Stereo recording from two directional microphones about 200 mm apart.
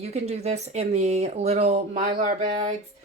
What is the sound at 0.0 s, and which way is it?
Speech, 35° right (ahead or behind).